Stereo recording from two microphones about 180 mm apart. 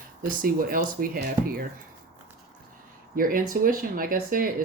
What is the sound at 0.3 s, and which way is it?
Speech, 50° right (ahead or behind).